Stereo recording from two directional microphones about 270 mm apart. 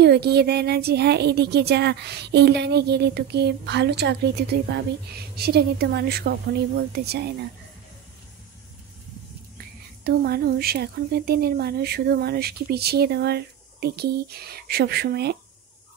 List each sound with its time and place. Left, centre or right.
0.0 s speech: right
10.0 s speech: right